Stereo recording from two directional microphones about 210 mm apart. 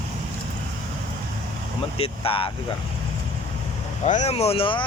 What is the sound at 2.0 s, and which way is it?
Speech, 25° left (ahead or behind).